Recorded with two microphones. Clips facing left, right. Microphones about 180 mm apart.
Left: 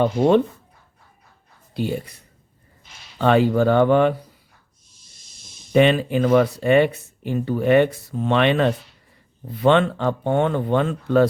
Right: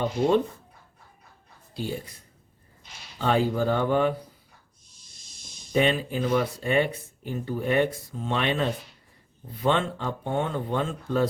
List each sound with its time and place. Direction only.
0.0 s speech: 65° left (ahead or behind)
1.7 s speech: 65° left (ahead or behind)
5.7 s speech: 75° left (ahead or behind)